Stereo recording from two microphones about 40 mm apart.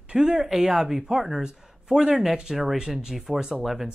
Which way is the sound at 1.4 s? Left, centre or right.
Centre.